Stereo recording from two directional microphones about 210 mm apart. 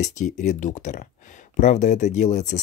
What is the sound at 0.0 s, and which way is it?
Speech, 35° left (ahead or behind).